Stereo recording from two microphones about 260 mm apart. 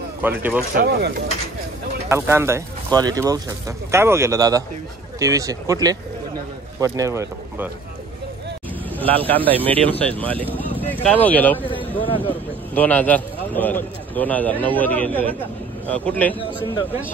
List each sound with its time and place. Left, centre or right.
0.2 s speech: centre
0.7 s speech: right
2.0 s speech: centre
8.9 s a sound: centre
9.3 s a man's voice: centre
12.0 s speech: centre
12.7 s a man's voice: centre